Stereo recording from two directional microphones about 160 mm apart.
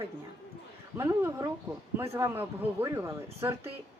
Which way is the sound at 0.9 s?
15° right (ahead or behind).